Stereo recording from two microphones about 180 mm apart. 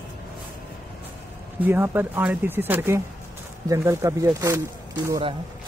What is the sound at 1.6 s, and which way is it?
Speech, 10° right (ahead or behind).